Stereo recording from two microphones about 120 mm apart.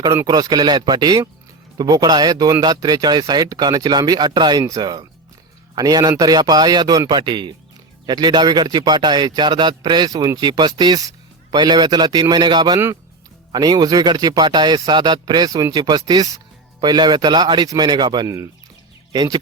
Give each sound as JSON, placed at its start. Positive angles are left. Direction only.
{"t": 0.3, "sound": "speech", "side_deg": -35}